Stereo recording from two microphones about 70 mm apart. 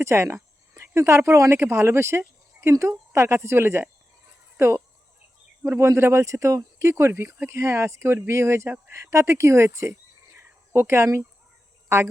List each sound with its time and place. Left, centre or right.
0.0 s speech: right
10.3 s a sound: right
11.9 s speech: right